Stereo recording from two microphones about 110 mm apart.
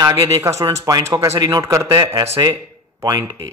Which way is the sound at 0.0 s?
35° right (ahead or behind).